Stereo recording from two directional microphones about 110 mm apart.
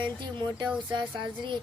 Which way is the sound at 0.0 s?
45° right (ahead or behind).